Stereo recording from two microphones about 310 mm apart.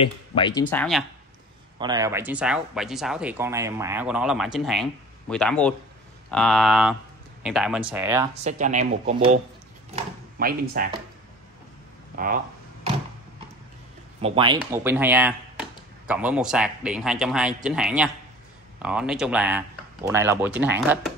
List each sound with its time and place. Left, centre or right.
0.0 s speech: centre
1.8 s speech: centre
8.5 s speech: right
14.2 s speech: centre